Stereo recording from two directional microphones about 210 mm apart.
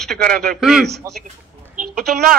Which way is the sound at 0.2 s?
45° right (ahead or behind).